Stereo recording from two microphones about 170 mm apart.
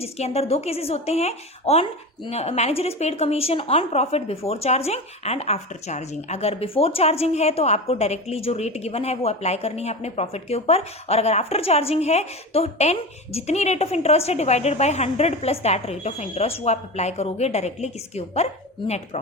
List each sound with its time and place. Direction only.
0.0 s speech: 35° left (ahead or behind)